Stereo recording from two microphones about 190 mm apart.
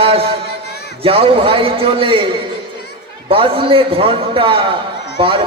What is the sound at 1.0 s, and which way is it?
A man's voice, 30° right (ahead or behind).